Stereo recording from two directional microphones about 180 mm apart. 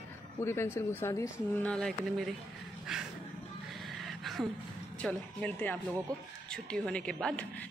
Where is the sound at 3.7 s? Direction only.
Centre (ahead or behind).